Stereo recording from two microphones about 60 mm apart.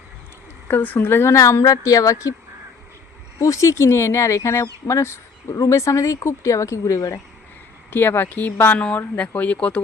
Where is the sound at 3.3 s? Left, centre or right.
Left.